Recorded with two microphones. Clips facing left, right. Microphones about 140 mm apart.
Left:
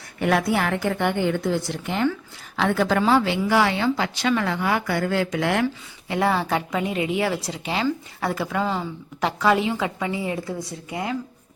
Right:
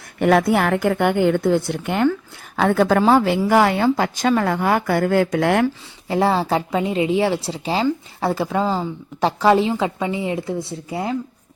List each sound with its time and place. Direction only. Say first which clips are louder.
0.2 s a woman's voice: right 5 dB; 50° right (ahead or behind)
6.1 s a woman's voice: right 4 dB; 30° right (ahead or behind)